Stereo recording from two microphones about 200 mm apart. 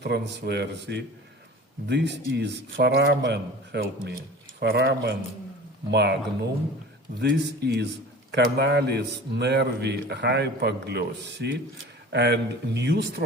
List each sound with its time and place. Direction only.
0.0 s a man's voice: 55° right (ahead or behind)